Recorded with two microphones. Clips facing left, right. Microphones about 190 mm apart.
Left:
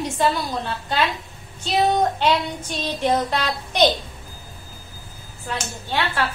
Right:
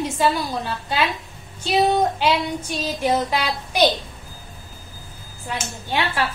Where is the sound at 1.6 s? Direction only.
10° right (ahead or behind).